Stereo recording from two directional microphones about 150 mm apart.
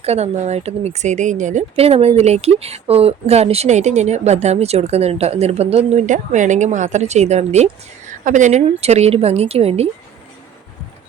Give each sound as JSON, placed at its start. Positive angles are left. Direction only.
{"t": 0.0, "sound": "speech", "side_deg": -45}